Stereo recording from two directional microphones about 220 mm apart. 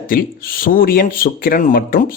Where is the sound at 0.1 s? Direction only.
40° left (ahead or behind).